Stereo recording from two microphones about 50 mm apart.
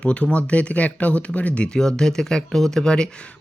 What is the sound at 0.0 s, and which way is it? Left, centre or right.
Speech, left.